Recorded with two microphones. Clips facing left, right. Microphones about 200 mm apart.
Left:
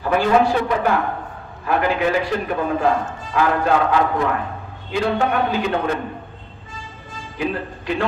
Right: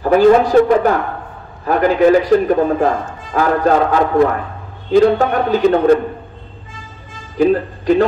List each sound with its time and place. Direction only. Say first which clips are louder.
0.0 s a man's voice: right 7 dB; 40° right (ahead or behind)
7.3 s speech: right 11 dB; 40° right (ahead or behind)